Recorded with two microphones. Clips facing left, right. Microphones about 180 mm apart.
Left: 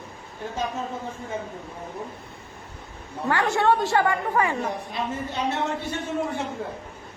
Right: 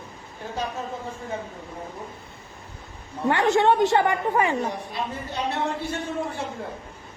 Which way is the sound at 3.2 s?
20° right (ahead or behind).